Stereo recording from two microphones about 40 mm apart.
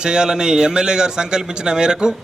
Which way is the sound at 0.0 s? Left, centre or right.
Centre.